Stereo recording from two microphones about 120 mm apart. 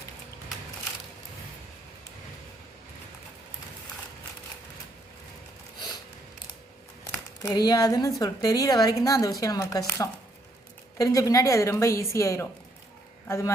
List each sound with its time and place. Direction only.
7.4 s a woman's voice: 35° left (ahead or behind)